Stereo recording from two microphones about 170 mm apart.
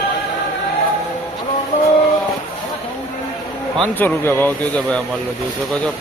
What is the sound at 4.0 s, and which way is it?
Speech, 10° left (ahead or behind).